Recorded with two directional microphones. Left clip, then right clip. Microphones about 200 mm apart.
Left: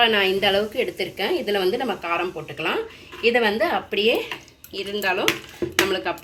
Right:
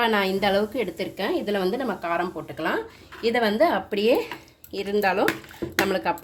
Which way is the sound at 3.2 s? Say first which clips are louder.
Left 1 dB; 60° right (ahead or behind).